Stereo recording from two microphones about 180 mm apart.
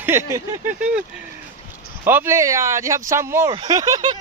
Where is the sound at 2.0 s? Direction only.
10° right (ahead or behind).